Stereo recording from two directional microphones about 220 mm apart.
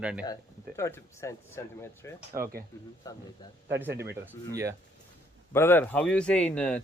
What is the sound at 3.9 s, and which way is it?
Speech, 50° right (ahead or behind).